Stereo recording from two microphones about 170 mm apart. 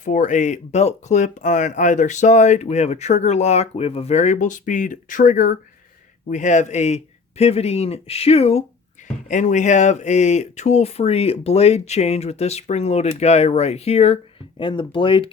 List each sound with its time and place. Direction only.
0.0 s speech: 45° left (ahead or behind)
9.0 s a sound: 45° left (ahead or behind)
9.3 s speech: 45° left (ahead or behind); by 15.3 s 30° left (ahead or behind)